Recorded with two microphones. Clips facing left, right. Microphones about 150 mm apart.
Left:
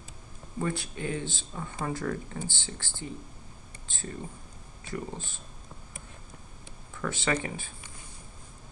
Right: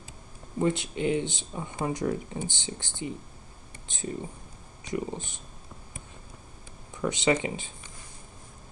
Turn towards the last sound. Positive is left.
turn(degrees=-20)  # may be behind; listen again after turning